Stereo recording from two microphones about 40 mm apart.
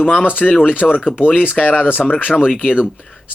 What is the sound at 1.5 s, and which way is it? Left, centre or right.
Speech, left.